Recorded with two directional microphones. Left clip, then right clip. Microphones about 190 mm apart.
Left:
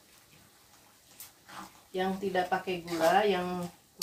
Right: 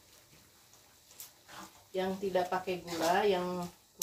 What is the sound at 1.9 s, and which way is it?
Speech, 35° left (ahead or behind).